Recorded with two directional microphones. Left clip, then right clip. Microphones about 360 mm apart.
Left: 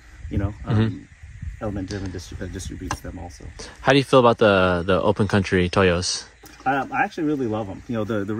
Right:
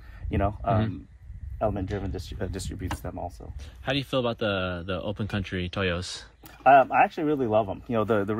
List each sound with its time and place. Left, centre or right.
0.3 s speech: centre
2.1 s speech: centre
3.5 s speech: centre